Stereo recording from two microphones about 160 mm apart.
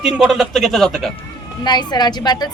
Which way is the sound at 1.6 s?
25° left (ahead or behind).